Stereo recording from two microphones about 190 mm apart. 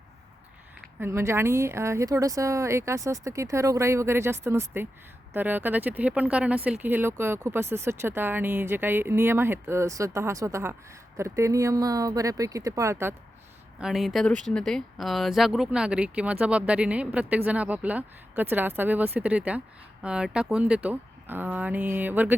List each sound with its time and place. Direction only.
0.9 s speech: 10° right (ahead or behind)
13.7 s speech: centre (ahead or behind)